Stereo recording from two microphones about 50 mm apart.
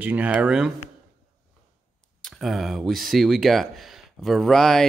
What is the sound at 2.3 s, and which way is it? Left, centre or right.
Speech, centre.